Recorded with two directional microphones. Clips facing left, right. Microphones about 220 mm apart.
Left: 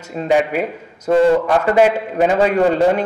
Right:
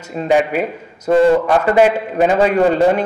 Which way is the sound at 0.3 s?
10° right (ahead or behind).